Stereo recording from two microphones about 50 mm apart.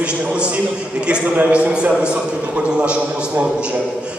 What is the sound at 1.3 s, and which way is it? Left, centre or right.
A man's voice, right.